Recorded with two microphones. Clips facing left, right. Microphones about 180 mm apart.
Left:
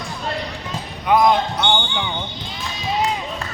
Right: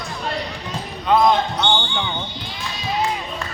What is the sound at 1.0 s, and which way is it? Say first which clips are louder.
Basketball bounce: even; 15° left (ahead or behind).